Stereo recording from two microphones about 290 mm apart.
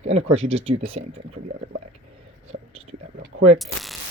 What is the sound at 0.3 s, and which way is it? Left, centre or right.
Speech, right.